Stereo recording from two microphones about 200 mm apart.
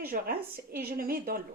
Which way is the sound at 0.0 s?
50° right (ahead or behind).